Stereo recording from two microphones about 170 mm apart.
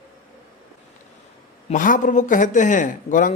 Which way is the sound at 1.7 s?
50° left (ahead or behind).